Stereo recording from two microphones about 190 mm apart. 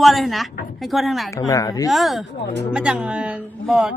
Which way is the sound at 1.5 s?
20° left (ahead or behind).